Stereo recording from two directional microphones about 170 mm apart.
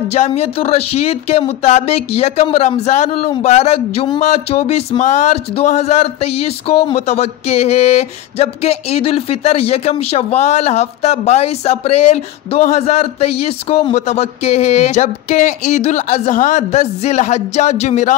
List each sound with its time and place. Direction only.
0.1 s speech: 40° left (ahead or behind)